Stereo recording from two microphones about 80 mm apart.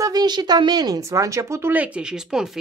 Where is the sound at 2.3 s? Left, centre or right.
Centre.